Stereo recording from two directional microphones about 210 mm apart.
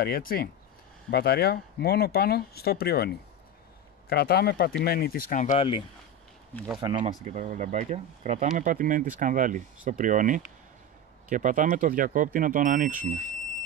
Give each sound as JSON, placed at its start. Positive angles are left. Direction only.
{"t": 0.0, "sound": "speech", "side_deg": 45}
{"t": 4.1, "sound": "speech", "side_deg": 50}
{"t": 6.8, "sound": "speech", "side_deg": -30}